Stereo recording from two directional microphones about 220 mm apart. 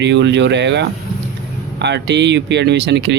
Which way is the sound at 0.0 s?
50° right (ahead or behind).